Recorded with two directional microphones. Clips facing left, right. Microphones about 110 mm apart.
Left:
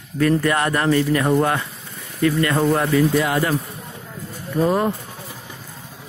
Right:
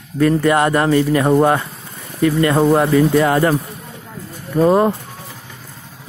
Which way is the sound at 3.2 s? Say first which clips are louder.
Right 6 dB; 40° right (ahead or behind).